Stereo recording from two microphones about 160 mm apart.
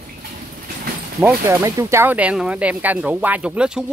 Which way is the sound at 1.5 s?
15° right (ahead or behind).